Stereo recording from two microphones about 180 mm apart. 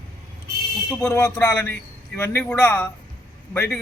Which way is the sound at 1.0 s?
15° left (ahead or behind).